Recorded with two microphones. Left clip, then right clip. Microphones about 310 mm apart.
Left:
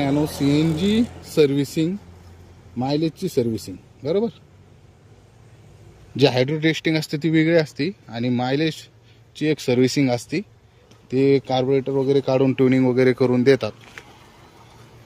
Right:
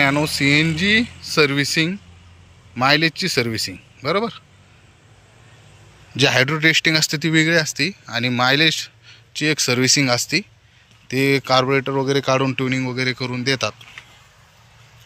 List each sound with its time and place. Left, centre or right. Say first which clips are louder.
0.4 s speech: right 4 dB; centre
6.1 s speech: right 2 dB; centre
11.6 s speech: right 1 dB; right
12.0 s speech: even; centre